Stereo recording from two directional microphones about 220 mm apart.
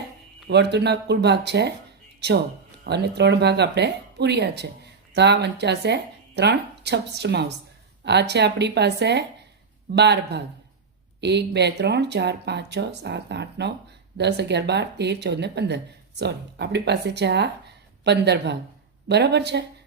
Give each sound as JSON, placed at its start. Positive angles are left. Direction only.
{"t": 0.4, "sound": "speech", "side_deg": -50}
{"t": 2.8, "sound": "speech", "side_deg": -50}